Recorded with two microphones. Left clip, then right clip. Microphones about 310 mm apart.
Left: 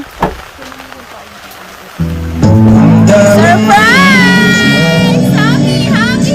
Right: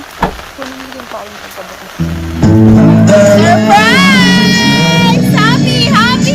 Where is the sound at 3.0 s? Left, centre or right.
Left.